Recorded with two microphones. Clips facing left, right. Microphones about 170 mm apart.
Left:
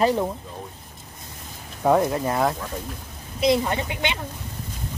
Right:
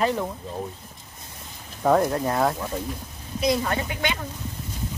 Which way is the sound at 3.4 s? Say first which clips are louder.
Left 3 dB; 20° left (ahead or behind).